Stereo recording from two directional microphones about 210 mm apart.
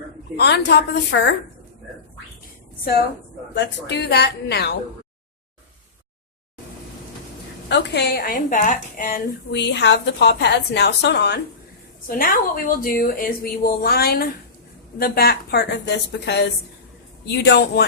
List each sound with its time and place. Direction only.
0.3 s a woman's voice: 55° left (ahead or behind)
3.5 s a woman's voice: 55° left (ahead or behind)
7.7 s a woman's voice: 50° left (ahead or behind)
12.0 s a woman's voice: 45° left (ahead or behind)